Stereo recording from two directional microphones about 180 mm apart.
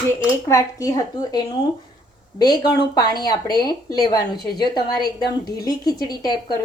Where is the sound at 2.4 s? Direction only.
25° left (ahead or behind).